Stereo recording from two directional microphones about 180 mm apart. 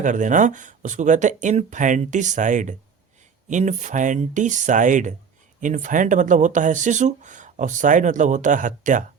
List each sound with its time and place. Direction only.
0.0 s speech: 45° right (ahead or behind)